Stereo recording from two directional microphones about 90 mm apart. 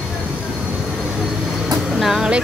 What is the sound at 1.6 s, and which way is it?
Train, 5° right (ahead or behind).